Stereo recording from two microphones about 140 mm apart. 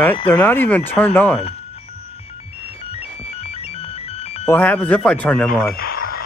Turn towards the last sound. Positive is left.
turn(degrees=90)